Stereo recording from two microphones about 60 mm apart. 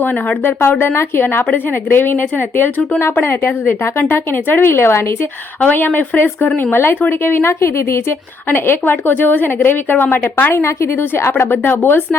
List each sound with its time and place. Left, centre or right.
0.0 s a woman's voice: left
5.5 s a woman's voice: left
8.4 s a woman's voice: left
10.5 s speech: left
11.1 s a woman's voice: left